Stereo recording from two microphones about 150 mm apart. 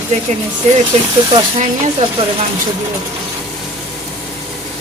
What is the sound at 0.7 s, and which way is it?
Speech, 50° right (ahead or behind).